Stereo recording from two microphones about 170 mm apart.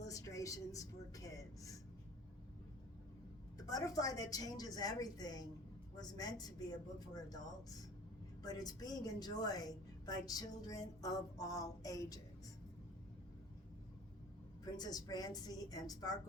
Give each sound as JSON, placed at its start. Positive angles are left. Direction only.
{"t": 0.0, "sound": "a sound", "side_deg": 20}
{"t": 3.7, "sound": "a woman's voice", "side_deg": 20}
{"t": 14.6, "sound": "a woman's voice", "side_deg": 20}